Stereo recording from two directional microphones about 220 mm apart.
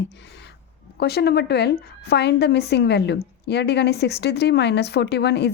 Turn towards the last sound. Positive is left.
turn(degrees=50)  # may be behind; listen again after turning